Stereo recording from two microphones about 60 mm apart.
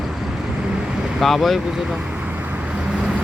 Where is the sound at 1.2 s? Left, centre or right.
Centre.